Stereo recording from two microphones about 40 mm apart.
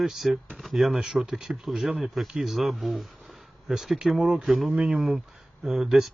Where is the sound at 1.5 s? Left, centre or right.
Right.